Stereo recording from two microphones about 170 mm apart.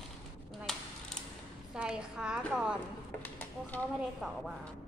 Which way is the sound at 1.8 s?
5° right (ahead or behind).